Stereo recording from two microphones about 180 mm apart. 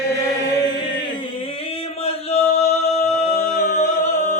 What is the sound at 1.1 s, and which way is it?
Chant, 30° left (ahead or behind).